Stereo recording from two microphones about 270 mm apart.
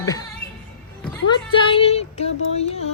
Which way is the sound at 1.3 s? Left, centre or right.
Centre.